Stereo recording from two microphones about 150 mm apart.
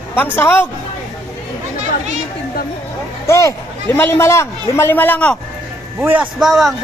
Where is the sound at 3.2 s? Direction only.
20° left (ahead or behind).